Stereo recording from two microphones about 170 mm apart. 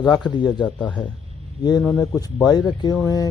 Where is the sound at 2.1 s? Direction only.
20° left (ahead or behind).